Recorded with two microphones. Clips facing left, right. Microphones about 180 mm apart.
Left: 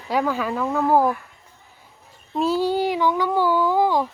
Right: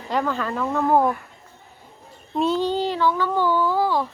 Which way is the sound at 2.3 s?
5° left (ahead or behind).